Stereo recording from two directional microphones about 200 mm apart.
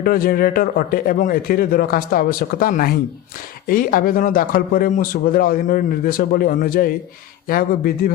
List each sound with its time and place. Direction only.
0.0 s speech: 45° left (ahead or behind)